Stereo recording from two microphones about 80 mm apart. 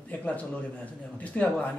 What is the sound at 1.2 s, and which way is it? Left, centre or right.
Speech, centre.